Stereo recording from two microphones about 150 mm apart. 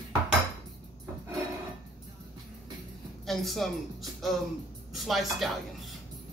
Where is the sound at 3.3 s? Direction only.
Centre (ahead or behind).